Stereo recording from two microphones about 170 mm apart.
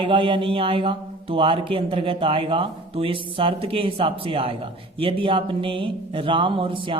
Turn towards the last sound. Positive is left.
turn(degrees=-30)  # may be behind; listen again after turning